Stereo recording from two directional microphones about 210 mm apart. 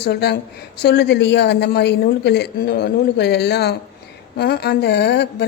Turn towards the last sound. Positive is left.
turn(degrees=55)  # may be behind; listen again after turning